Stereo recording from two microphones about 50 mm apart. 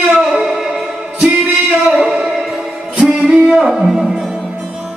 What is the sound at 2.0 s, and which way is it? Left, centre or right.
Music, centre.